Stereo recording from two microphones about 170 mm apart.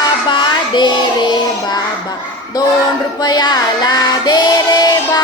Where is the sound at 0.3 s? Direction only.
25° left (ahead or behind).